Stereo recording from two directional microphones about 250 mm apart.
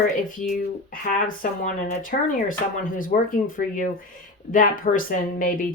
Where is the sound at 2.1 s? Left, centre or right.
Left.